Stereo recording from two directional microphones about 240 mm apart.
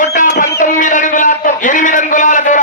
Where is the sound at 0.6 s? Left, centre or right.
Left.